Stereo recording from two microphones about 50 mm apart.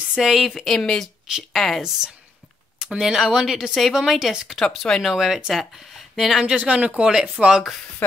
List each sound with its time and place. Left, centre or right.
0.1 s speech: centre
0.6 s a woman's voice: centre
3.0 s speech: centre
4.5 s speech: centre
5.0 s speech: centre
6.4 s speech: right
7.0 s speech: centre